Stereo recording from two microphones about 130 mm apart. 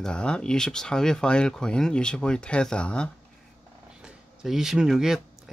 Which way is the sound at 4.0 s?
5° right (ahead or behind).